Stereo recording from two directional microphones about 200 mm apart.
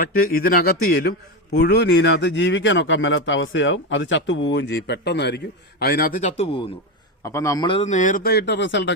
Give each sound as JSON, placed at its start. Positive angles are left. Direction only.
{"t": 0.0, "sound": "a man's voice", "side_deg": 45}
{"t": 7.2, "sound": "a man's voice", "side_deg": 15}